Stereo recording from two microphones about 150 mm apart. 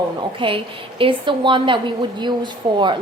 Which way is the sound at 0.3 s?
35° right (ahead or behind).